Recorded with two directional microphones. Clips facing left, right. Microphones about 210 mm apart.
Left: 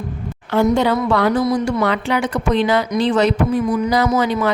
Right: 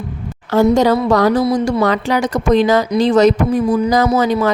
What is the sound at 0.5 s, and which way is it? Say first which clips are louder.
Speech: right 4 dB; 40° right (ahead or behind).